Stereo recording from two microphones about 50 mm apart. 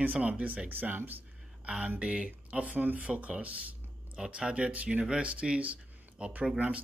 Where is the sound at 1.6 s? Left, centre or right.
Right.